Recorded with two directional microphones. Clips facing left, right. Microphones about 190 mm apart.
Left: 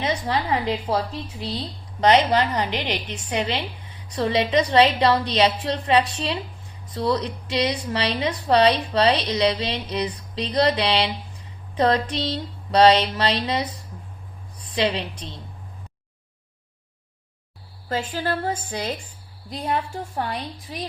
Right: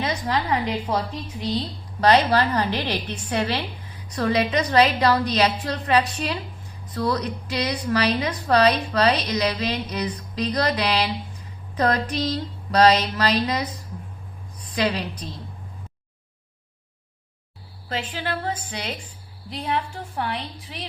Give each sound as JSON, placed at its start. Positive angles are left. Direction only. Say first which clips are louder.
{"t": 0.0, "sound": "a woman's voice", "louder": "left 1 dB", "side_deg": 30}
{"t": 2.0, "sound": "a woman's voice", "louder": "even", "side_deg": 20}
{"t": 17.8, "sound": "a woman's voice", "louder": "left 3 dB", "side_deg": 40}